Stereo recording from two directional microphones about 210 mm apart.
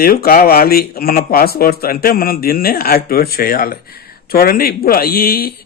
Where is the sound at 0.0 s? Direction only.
45° left (ahead or behind).